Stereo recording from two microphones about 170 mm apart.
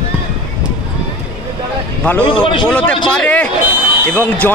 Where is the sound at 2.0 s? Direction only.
10° left (ahead or behind).